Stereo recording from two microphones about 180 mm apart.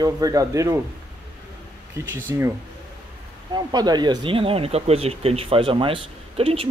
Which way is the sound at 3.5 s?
25° right (ahead or behind).